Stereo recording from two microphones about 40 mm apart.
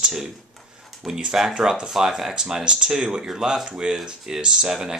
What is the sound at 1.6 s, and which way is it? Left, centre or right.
Speech, centre.